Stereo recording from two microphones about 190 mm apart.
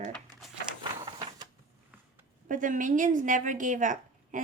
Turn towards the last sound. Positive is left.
turn(degrees=-40)  # may be behind; listen again after turning